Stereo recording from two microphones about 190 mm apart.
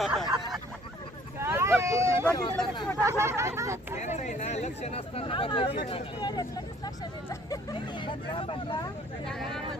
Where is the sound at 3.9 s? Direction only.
35° left (ahead or behind).